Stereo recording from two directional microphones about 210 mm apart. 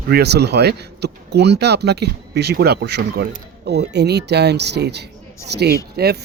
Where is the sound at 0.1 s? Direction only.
50° right (ahead or behind).